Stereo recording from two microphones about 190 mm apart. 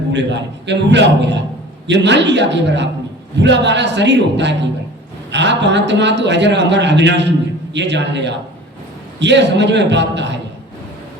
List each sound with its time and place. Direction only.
0.1 s a man's voice: 65° right (ahead or behind)